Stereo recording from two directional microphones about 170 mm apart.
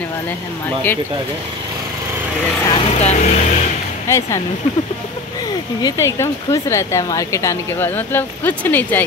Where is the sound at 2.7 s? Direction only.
35° left (ahead or behind).